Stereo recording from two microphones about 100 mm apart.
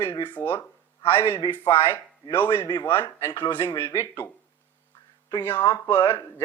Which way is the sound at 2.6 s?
45° left (ahead or behind).